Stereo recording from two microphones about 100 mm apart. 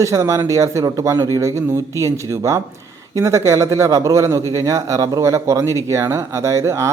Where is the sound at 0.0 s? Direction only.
30° right (ahead or behind).